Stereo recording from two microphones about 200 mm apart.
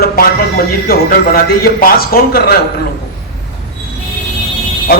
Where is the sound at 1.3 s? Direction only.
50° left (ahead or behind).